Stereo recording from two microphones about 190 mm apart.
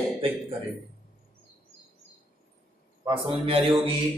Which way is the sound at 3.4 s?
30° right (ahead or behind).